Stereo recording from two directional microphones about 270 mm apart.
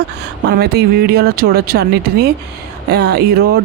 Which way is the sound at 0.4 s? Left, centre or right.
Right.